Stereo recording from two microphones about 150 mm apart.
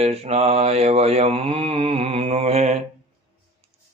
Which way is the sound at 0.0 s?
45° right (ahead or behind).